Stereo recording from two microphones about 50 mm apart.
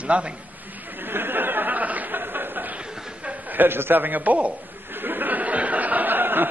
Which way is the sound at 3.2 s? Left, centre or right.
Right.